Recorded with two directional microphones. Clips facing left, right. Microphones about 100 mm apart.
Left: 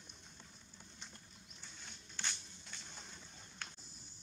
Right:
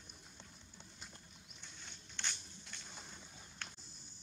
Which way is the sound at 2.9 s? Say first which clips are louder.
Right 1 dB; 5° right (ahead or behind).